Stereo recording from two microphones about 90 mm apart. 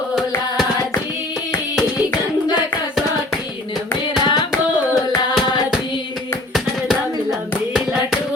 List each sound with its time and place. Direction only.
4.2 s hands: 55° left (ahead or behind)
6.5 s hands: centre (ahead or behind)